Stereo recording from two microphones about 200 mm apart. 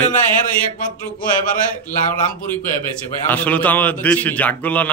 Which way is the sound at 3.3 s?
10° left (ahead or behind).